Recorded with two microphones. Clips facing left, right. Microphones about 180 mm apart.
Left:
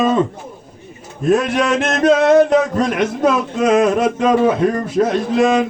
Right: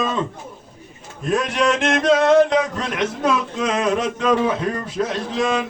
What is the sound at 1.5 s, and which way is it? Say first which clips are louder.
Speech: left 2 dB; 50° left (ahead or behind).